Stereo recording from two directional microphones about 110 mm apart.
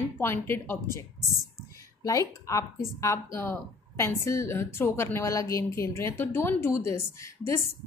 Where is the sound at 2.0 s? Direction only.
30° left (ahead or behind).